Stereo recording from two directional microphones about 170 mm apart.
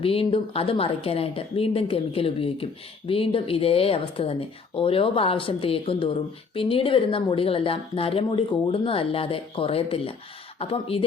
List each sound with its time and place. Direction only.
0.0 s speech: 35° left (ahead or behind)